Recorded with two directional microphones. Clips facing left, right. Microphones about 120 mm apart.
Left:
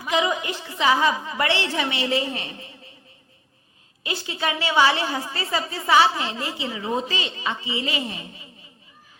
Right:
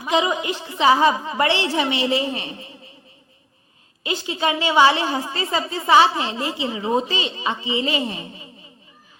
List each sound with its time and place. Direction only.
0.1 s a woman's voice: 25° right (ahead or behind)
4.0 s a woman's voice: 25° right (ahead or behind)